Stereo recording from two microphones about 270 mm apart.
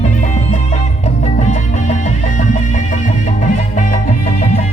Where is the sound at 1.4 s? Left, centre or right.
Left.